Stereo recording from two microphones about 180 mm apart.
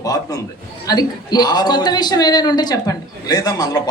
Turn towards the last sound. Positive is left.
turn(degrees=20)  # may be behind; listen again after turning